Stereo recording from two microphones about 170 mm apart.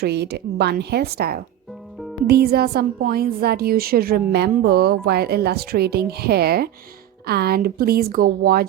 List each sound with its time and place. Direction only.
0.0 s a woman's voice: 75° right (ahead or behind)